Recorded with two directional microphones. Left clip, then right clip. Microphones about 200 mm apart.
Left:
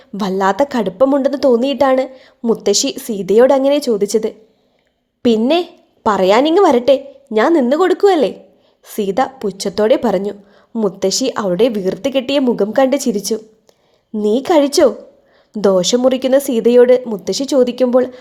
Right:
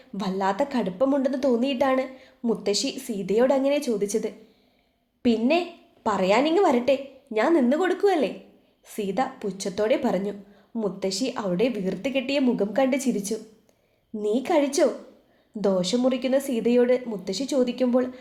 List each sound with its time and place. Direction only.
0.2 s a woman's voice: 45° left (ahead or behind)